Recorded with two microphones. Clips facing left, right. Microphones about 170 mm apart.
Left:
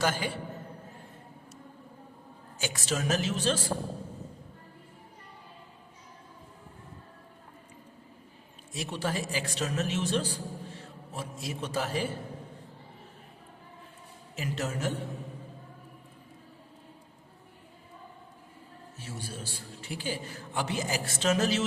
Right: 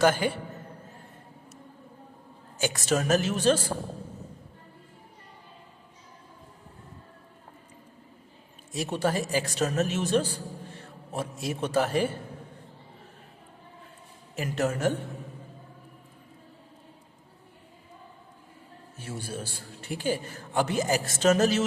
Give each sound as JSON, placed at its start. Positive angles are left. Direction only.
{"t": 0.0, "sound": "a man's voice", "side_deg": -55}
{"t": 2.6, "sound": "a man's voice", "side_deg": -50}
{"t": 8.7, "sound": "a man's voice", "side_deg": -45}
{"t": 10.8, "sound": "a man's voice", "side_deg": -60}
{"t": 14.3, "sound": "a man's voice", "side_deg": -55}
{"t": 19.0, "sound": "a man's voice", "side_deg": -55}